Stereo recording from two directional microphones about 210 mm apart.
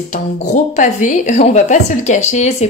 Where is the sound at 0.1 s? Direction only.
35° left (ahead or behind).